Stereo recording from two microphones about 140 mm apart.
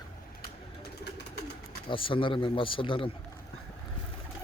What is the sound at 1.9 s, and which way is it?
A man's voice, 35° left (ahead or behind).